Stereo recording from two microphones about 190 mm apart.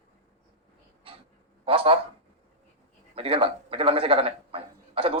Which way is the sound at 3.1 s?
30° right (ahead or behind).